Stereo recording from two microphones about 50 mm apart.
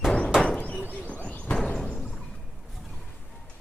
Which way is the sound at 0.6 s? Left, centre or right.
Left.